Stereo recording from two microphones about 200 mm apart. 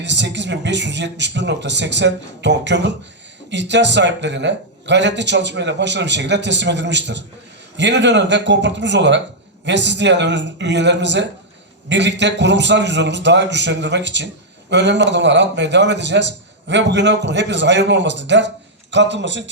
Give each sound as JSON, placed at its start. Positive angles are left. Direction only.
{"t": 0.0, "sound": "a man's voice", "side_deg": -60}